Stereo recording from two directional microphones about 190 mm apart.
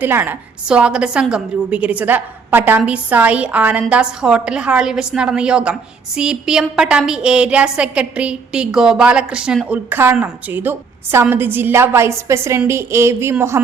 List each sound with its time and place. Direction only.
0.0 s a woman's voice: 10° right (ahead or behind)